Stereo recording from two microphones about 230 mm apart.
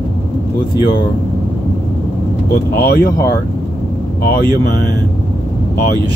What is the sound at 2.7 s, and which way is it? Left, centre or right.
Speech, left.